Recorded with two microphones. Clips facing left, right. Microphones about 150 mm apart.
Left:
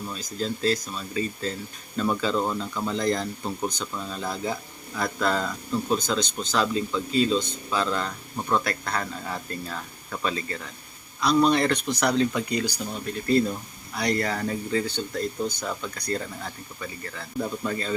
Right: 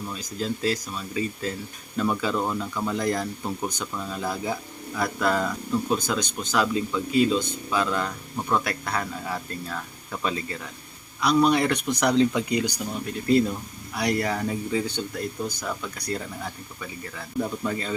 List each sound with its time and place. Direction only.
0.1 s speech: 15° right (ahead or behind)